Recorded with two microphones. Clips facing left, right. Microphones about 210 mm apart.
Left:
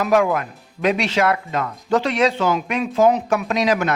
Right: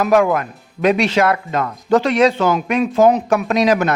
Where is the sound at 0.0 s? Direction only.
50° right (ahead or behind).